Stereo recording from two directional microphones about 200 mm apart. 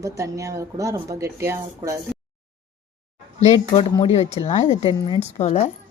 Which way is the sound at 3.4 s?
35° left (ahead or behind).